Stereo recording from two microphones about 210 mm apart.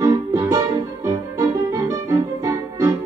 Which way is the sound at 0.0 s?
15° right (ahead or behind).